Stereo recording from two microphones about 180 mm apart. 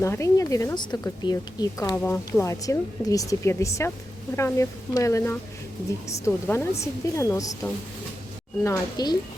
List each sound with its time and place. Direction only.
0.0 s a woman's voice: 15° left (ahead or behind)